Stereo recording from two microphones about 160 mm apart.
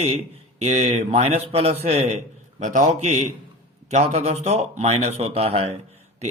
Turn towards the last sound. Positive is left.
turn(degrees=-40)  # may be behind; listen again after turning